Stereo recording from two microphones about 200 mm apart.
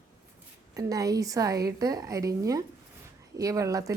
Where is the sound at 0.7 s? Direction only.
15° right (ahead or behind).